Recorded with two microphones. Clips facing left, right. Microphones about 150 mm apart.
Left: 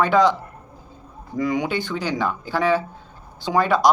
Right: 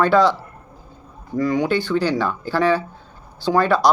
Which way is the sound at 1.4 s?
15° left (ahead or behind).